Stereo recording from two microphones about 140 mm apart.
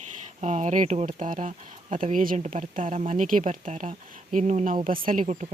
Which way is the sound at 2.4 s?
60° right (ahead or behind).